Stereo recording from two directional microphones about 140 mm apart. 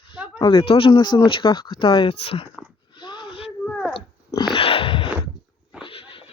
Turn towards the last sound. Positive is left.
turn(degrees=40)  # may be behind; listen again after turning